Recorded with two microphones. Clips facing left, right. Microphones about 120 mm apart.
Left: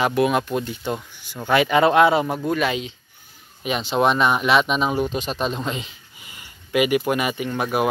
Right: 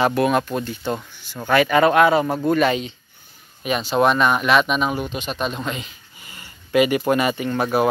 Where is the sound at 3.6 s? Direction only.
20° left (ahead or behind).